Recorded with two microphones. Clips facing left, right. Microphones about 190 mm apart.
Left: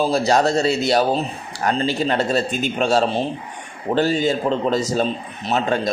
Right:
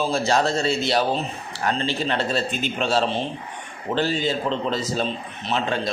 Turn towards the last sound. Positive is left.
turn(degrees=45)  # may be behind; listen again after turning